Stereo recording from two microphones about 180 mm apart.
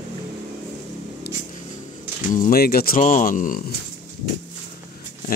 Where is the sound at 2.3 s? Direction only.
50° left (ahead or behind).